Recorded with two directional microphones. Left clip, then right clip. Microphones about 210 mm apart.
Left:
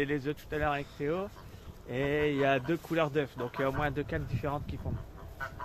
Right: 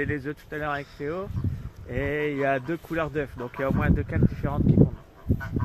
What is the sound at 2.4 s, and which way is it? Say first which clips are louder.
Speech: right 3 dB; 40° right (ahead or behind).